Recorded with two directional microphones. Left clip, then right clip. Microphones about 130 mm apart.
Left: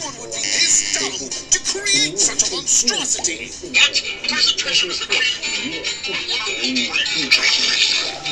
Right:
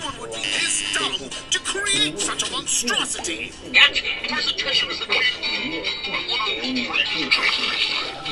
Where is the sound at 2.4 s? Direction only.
15° left (ahead or behind).